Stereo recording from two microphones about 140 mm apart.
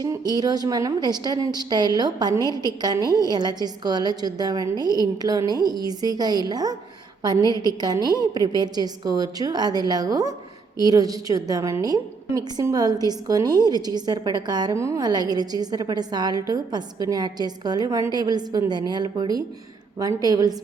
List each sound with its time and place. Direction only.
0.0 s a woman's voice: 30° right (ahead or behind)